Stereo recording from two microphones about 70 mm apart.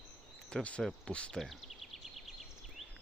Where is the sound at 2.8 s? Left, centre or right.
Centre.